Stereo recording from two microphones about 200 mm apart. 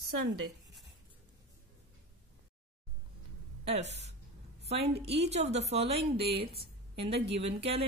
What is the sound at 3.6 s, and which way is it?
A woman's voice, 30° right (ahead or behind).